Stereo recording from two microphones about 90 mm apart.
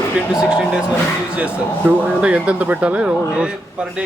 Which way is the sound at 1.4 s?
15° right (ahead or behind).